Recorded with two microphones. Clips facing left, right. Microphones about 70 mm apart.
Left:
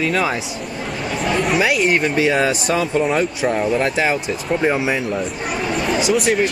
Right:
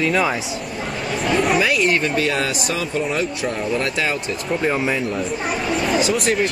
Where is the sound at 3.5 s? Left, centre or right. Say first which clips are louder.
Left 4 dB; centre.